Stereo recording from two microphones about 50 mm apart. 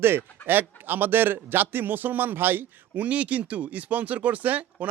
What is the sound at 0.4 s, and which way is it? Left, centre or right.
A man's voice, right.